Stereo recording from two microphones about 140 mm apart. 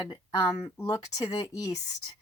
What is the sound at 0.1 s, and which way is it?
A woman's voice, 30° left (ahead or behind).